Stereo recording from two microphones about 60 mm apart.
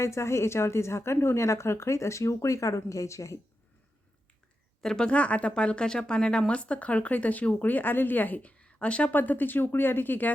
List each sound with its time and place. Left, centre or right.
0.0 s a woman's voice: left
4.8 s speech: centre; by 8.4 s left
8.4 s speech: centre; by 10.3 s left